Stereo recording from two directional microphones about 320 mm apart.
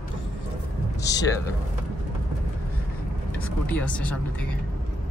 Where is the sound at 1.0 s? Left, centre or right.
Centre.